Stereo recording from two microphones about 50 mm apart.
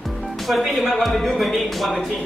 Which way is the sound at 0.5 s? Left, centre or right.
Centre.